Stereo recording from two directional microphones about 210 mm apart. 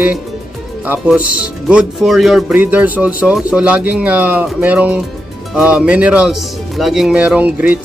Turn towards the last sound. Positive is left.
turn(degrees=-5)  # may be behind; listen again after turning